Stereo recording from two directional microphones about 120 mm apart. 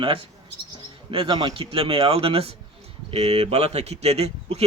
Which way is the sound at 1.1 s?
45° right (ahead or behind).